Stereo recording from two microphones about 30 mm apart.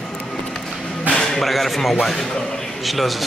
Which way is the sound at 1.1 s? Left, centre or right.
Centre.